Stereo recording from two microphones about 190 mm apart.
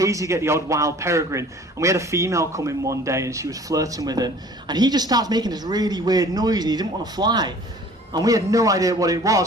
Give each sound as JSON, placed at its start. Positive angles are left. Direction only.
{"t": 0.0, "sound": "a man's voice", "side_deg": -15}